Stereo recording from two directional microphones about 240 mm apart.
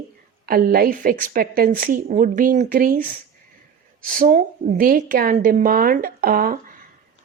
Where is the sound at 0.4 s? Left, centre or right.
Right.